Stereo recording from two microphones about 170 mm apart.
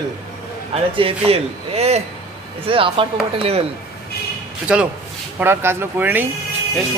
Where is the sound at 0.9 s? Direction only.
35° right (ahead or behind).